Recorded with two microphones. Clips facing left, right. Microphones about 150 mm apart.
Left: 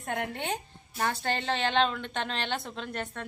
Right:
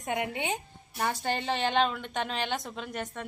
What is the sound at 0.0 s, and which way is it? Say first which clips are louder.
A woman's voice: right 2 dB; 15° right (ahead or behind).